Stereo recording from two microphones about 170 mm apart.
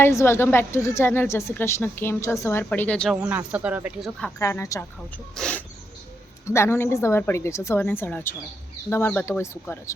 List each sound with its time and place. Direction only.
0.0 s a woman's voice: 15° left (ahead or behind)
3.2 s speech: 10° right (ahead or behind)
4.4 s a woman's voice: 15° left (ahead or behind)